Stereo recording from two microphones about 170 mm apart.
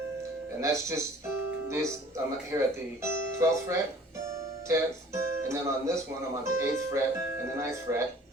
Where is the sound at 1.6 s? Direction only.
15° right (ahead or behind).